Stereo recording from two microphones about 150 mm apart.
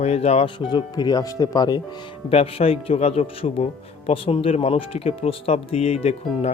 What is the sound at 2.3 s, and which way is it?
Speech, 40° left (ahead or behind).